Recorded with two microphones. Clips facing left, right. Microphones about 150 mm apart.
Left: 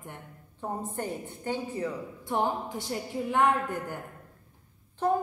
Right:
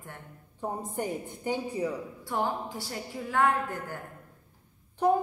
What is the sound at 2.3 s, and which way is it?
A woman's voice, 20° left (ahead or behind).